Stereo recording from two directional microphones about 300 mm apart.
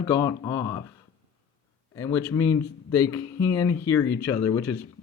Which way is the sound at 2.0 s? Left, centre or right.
Centre.